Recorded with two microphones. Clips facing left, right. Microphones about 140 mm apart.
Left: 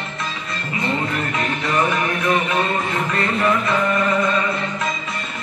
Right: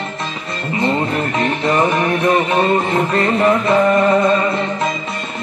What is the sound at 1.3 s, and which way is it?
Music, 30° right (ahead or behind).